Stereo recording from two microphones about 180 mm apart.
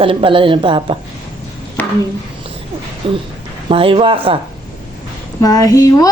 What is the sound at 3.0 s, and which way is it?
A woman's voice, 30° right (ahead or behind).